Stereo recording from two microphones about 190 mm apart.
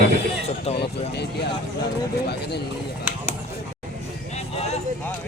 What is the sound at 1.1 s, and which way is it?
Speech, 60° left (ahead or behind).